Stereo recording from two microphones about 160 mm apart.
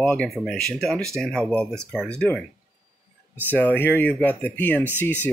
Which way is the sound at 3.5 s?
10° left (ahead or behind).